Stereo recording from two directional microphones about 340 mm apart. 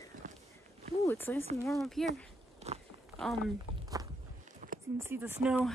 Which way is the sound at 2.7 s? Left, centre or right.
Centre.